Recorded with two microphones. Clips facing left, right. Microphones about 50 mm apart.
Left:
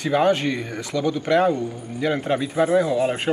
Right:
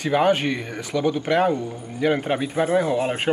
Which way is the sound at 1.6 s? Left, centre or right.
Right.